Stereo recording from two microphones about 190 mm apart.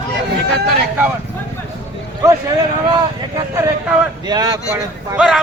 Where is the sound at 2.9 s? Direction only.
20° right (ahead or behind).